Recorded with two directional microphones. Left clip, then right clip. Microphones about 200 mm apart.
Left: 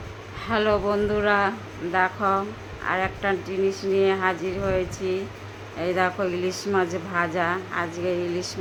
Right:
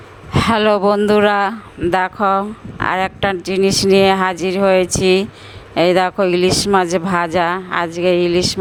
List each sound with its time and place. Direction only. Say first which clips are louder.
0.3 s speech: right 9 dB; 60° right (ahead or behind)